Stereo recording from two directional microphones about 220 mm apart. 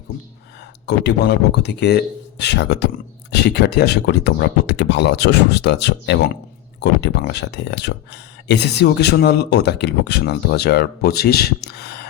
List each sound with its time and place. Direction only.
0.9 s speech: 50° left (ahead or behind)